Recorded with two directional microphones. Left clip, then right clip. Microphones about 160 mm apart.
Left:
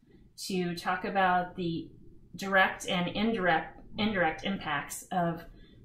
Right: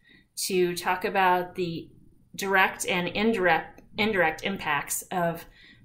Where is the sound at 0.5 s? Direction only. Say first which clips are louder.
Right 7 dB; 20° right (ahead or behind).